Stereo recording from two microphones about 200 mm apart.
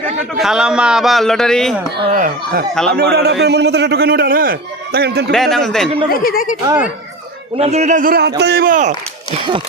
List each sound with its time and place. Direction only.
0.3 s a man's voice: centre (ahead or behind)
2.1 s a man's voice: 45° right (ahead or behind)
5.3 s a man's voice: centre (ahead or behind)
6.1 s speech: 45° left (ahead or behind)
6.7 s speech: 10° right (ahead or behind)
7.6 s speech: 35° right (ahead or behind)